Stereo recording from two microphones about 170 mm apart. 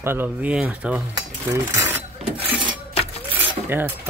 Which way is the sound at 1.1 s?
25° right (ahead or behind).